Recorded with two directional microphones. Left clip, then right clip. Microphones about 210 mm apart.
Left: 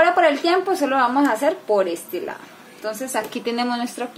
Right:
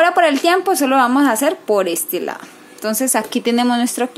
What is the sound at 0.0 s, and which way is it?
Speech, 40° right (ahead or behind).